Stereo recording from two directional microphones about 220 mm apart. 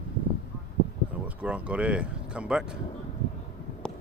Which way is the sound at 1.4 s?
5° right (ahead or behind).